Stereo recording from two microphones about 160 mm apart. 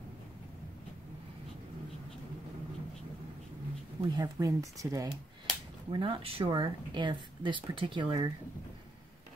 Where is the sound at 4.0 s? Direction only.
25° right (ahead or behind).